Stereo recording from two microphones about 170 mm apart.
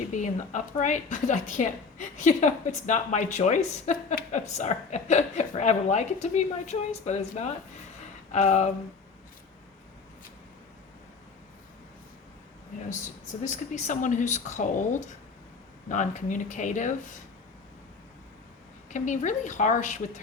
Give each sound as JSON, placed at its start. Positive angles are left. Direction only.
{"t": 0.1, "sound": "a woman's voice", "side_deg": 45}
{"t": 13.4, "sound": "a woman's voice", "side_deg": 45}
{"t": 18.9, "sound": "a woman's voice", "side_deg": 45}